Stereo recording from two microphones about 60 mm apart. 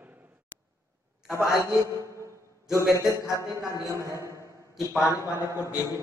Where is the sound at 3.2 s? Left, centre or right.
Left.